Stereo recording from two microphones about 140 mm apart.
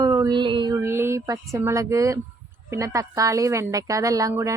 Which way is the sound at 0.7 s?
20° right (ahead or behind).